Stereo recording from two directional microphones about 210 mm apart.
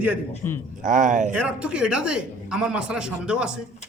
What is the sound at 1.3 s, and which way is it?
Speech, 5° right (ahead or behind).